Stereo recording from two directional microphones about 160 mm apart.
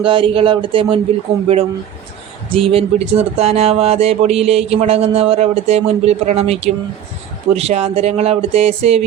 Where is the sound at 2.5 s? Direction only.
35° right (ahead or behind).